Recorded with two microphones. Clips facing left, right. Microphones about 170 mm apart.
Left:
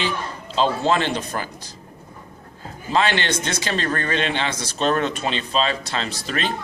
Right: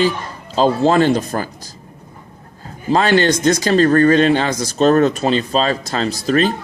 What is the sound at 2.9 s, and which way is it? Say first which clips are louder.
Speech: right 7 dB; 40° right (ahead or behind).